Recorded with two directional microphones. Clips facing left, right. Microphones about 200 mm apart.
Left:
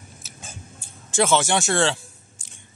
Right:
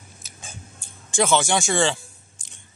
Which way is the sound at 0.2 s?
5° left (ahead or behind).